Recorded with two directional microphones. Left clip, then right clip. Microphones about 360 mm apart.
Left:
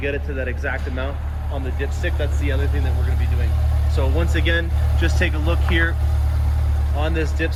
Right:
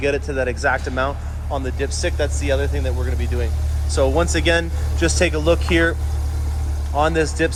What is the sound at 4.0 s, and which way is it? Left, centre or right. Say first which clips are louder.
Speech: right 7 dB; centre.